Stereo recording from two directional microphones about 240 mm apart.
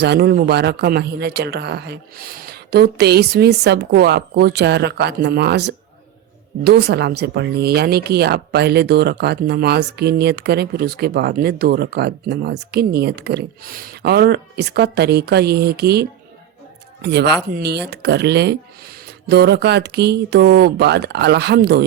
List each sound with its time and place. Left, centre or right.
0.0 s speech: right